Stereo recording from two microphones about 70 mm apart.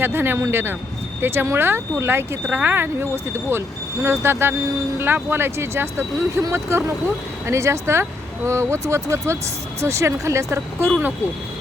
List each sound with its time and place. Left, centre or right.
0.0 s speech: right